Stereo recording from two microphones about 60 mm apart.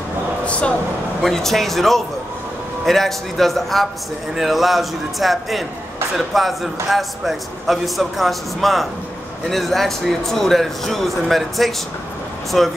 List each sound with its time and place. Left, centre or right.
0.5 s speech: centre
1.2 s a man's voice: centre